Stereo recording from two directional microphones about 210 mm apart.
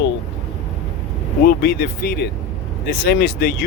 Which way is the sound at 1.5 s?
45° left (ahead or behind).